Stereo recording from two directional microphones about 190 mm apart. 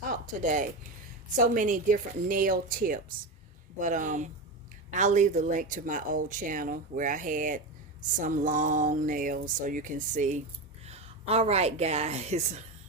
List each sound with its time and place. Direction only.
0.1 s zipper: 40° right (ahead or behind)
1.5 s a woman's voice: 45° right (ahead or behind)